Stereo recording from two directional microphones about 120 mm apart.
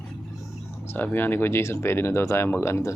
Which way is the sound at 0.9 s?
15° left (ahead or behind).